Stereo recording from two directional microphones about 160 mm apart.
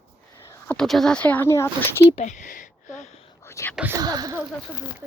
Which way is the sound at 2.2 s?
55° left (ahead or behind).